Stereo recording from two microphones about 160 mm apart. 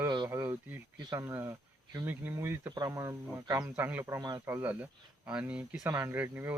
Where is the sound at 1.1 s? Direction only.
20° right (ahead or behind).